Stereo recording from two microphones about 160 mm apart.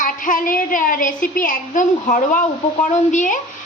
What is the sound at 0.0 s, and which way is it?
A woman's voice, 55° left (ahead or behind).